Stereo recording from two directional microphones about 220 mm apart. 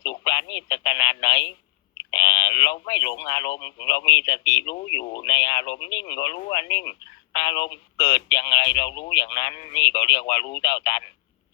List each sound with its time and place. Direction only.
0.0 s radio: 20° left (ahead or behind)
2.0 s speech: 20° left (ahead or behind)